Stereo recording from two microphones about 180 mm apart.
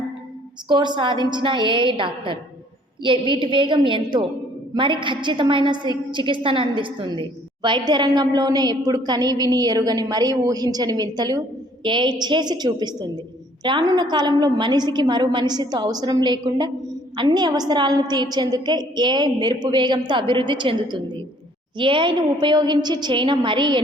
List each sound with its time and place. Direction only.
0.7 s a woman's voice: 25° right (ahead or behind)